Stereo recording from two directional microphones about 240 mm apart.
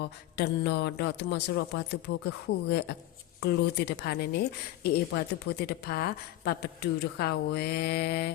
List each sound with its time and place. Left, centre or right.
0.0 s a woman's voice: left